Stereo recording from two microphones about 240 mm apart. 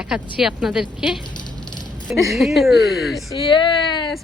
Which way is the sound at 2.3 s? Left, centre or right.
Centre.